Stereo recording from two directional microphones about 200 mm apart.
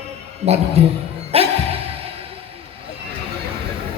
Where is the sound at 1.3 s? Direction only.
30° right (ahead or behind).